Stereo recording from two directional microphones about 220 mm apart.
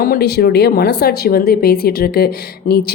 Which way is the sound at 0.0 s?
45° left (ahead or behind).